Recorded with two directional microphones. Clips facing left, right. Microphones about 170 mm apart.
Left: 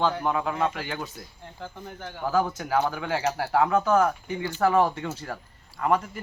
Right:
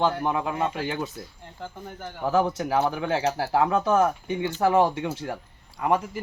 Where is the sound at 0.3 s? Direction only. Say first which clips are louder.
Even; 20° right (ahead or behind).